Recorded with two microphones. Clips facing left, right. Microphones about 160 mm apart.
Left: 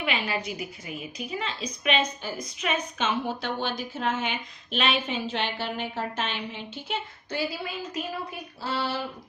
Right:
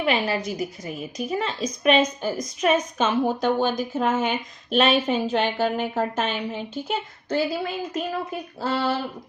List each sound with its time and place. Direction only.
0.0 s a woman's voice: 40° right (ahead or behind)